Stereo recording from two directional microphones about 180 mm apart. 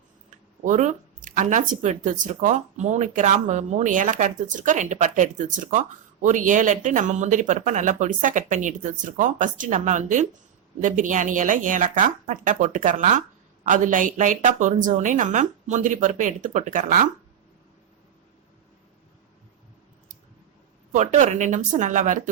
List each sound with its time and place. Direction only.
0.6 s speech: 40° right (ahead or behind)
20.9 s speech: 45° right (ahead or behind)